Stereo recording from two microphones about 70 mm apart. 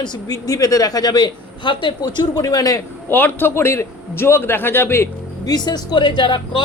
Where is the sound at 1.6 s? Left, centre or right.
Left.